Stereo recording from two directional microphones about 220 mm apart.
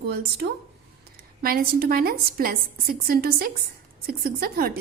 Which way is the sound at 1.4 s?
45° right (ahead or behind).